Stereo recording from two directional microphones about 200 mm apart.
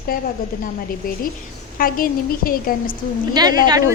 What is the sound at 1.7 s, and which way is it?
A woman's voice, 45° left (ahead or behind).